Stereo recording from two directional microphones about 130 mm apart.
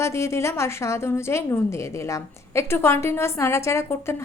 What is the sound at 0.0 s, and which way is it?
A woman's voice, 20° left (ahead or behind).